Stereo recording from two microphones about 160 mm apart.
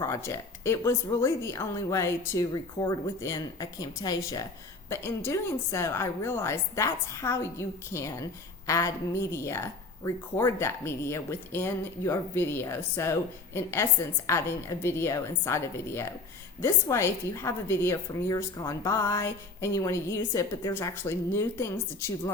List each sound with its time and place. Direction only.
0.0 s a woman's voice: 15° left (ahead or behind)